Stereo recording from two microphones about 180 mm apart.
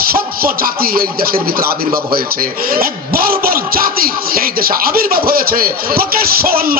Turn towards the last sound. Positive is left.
turn(degrees=-55)  # may be behind; listen again after turning